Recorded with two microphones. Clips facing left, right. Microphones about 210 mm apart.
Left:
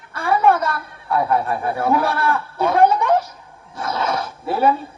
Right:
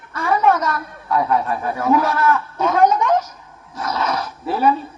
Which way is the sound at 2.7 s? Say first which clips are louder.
Even; 30° left (ahead or behind).